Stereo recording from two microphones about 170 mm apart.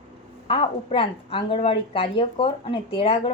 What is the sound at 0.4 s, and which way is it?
A woman's voice, 35° left (ahead or behind).